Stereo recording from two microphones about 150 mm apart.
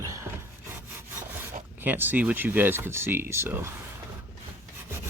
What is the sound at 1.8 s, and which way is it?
Speech, 10° right (ahead or behind).